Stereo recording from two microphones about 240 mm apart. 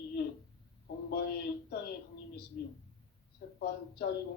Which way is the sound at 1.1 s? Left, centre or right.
Left.